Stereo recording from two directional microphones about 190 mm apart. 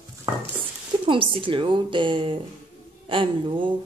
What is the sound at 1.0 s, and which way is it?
Speech, 25° right (ahead or behind).